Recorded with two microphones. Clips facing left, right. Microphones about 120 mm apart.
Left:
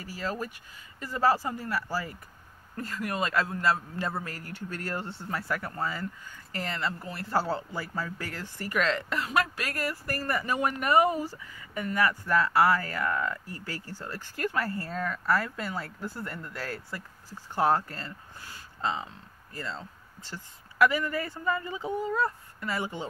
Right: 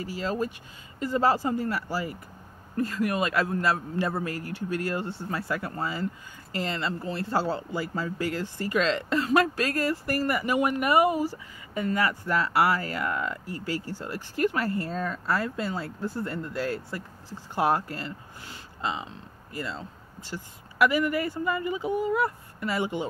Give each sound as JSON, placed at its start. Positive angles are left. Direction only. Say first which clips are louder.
{"t": 0.1, "sound": "speech", "louder": "right 3 dB", "side_deg": -20}